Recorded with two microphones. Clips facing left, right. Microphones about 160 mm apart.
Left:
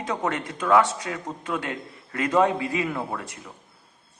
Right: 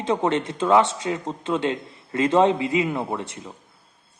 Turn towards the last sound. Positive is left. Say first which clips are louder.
# right 4 dB
turn(degrees=-25)  # may be behind; listen again after turning